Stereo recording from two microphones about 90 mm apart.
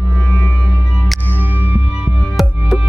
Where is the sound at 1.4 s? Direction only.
20° right (ahead or behind).